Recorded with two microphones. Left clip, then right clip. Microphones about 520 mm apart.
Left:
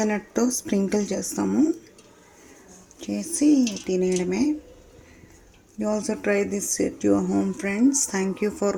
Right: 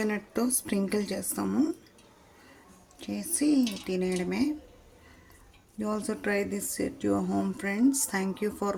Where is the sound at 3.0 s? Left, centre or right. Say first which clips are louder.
Left 7 dB; right.